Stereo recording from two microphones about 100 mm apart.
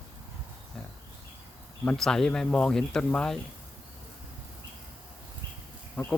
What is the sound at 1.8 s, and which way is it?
Speech, 10° left (ahead or behind).